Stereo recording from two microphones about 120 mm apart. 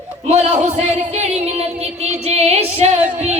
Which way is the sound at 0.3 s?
75° right (ahead or behind).